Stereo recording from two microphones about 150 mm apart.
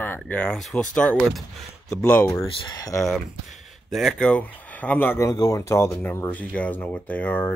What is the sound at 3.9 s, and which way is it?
Speech, centre (ahead or behind).